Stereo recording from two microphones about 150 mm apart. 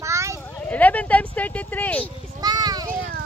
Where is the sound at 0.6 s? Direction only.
10° left (ahead or behind).